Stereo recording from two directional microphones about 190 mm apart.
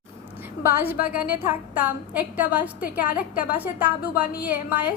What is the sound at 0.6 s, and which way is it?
A woman's voice, 10° right (ahead or behind).